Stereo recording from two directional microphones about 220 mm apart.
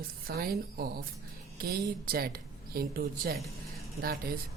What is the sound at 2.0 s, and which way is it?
A woman's voice, 40° right (ahead or behind).